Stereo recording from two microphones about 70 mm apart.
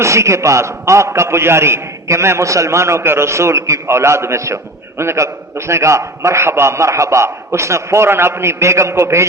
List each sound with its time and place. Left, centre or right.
0.0 s a man's voice: right